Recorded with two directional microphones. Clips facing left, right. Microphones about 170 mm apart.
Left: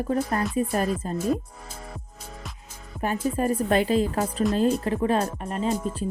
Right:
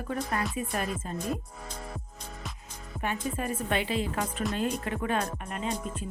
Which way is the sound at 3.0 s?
40° left (ahead or behind).